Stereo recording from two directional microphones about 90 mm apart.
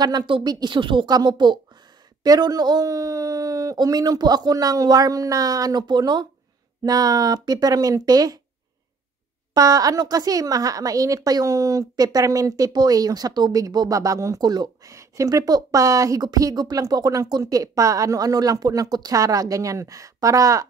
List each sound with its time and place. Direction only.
0.0 s speech: 55° right (ahead or behind)
6.8 s speech: 45° right (ahead or behind)
9.5 s speech: 40° right (ahead or behind)
14.9 s speech: 35° right (ahead or behind)